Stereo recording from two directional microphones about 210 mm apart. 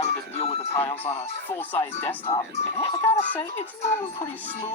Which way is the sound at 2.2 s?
30° left (ahead or behind).